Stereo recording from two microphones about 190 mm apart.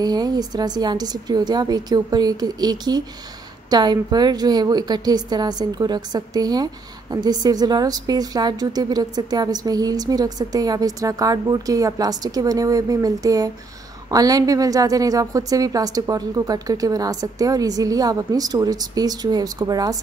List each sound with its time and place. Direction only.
0.0 s a woman's voice: 20° right (ahead or behind)